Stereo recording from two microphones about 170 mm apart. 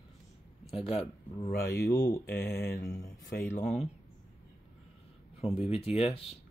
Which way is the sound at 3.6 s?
40° left (ahead or behind).